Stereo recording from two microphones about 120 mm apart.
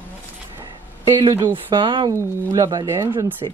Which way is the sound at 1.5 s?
40° right (ahead or behind).